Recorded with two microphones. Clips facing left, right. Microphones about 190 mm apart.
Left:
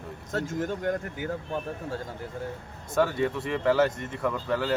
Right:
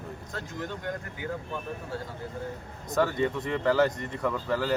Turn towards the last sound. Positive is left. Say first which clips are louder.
# left 1 dB
turn(degrees=0)  # may be behind; listen again after turning